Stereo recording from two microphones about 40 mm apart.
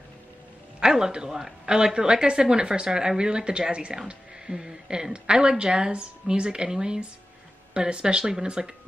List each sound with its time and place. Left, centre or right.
0.7 s a woman's voice: centre